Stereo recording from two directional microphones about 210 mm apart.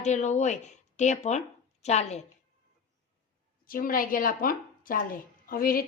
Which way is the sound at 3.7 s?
45° left (ahead or behind).